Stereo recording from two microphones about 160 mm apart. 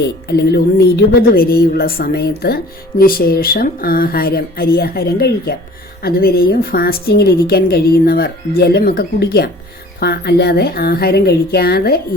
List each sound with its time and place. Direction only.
0.3 s music: 90° left
1.3 s a woman's voice: 75° left (ahead or behind)
10.0 s speech: 90° left; by 11.9 s 75° left (ahead or behind)